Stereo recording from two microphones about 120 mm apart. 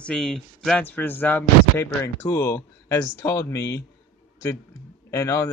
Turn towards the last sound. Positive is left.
turn(degrees=25)  # may be behind; listen again after turning